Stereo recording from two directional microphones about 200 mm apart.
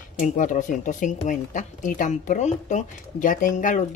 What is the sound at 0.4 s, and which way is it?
Speech, 40° left (ahead or behind).